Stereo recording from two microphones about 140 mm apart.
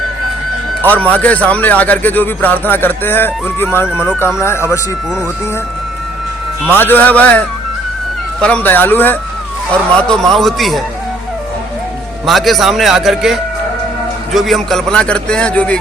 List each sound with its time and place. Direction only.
0.8 s speech: 10° left (ahead or behind)
6.7 s a man's voice: 15° left (ahead or behind)
12.2 s a man's voice: centre (ahead or behind)